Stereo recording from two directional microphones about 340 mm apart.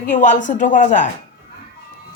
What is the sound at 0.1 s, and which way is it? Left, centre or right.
Speech, left.